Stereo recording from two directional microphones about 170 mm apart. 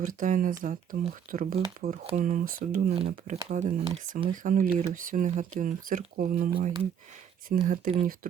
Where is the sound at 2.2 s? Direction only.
50° right (ahead or behind).